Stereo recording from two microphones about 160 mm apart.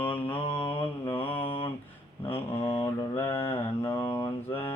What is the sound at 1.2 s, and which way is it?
Mantra, 10° left (ahead or behind).